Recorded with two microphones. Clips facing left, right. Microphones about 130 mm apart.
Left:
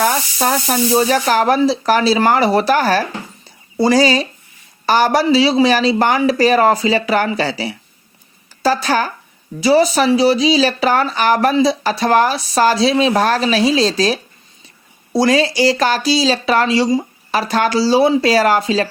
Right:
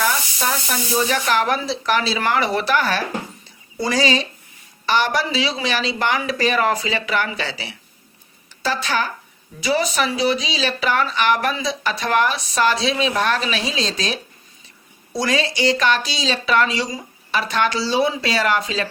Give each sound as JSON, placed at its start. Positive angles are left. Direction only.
{"t": 0.0, "sound": "speech", "side_deg": 45}